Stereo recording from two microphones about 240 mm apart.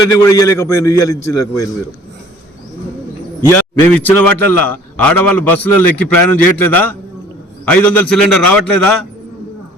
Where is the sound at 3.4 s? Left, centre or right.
Centre.